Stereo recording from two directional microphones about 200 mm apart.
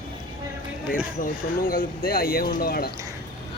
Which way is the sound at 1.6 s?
45° left (ahead or behind).